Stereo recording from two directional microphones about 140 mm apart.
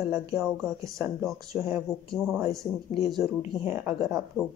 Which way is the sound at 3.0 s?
Centre (ahead or behind).